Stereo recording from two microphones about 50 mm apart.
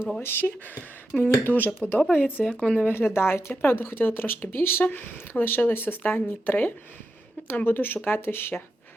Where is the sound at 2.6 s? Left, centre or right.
Left.